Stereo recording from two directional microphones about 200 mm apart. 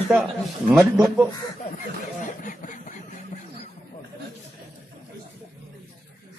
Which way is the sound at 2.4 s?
40° left (ahead or behind).